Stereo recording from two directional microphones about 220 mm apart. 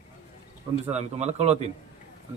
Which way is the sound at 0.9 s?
30° right (ahead or behind).